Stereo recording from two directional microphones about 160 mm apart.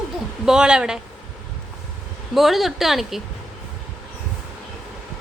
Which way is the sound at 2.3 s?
Centre (ahead or behind).